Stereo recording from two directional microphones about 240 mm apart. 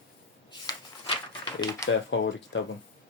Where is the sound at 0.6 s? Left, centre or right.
Centre.